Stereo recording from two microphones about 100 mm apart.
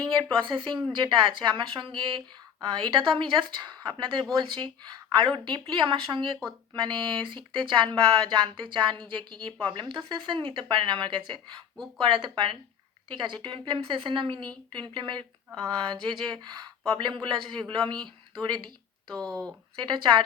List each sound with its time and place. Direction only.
0.0 s a woman's voice: 50° right (ahead or behind)
19.0 s speech: 5° left (ahead or behind)
19.7 s speech: 55° right (ahead or behind)